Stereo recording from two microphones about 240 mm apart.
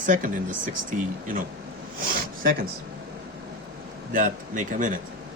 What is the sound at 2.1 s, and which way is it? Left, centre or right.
Filing, right.